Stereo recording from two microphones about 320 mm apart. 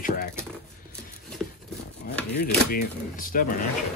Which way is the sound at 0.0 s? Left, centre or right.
Left.